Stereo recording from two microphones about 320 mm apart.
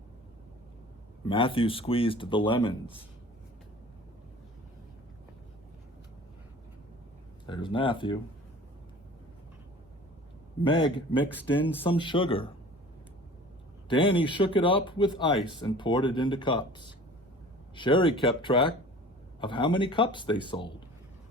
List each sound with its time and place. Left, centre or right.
1.3 s speech: centre
7.4 s speech: centre
10.6 s speech: centre
13.8 s speech: centre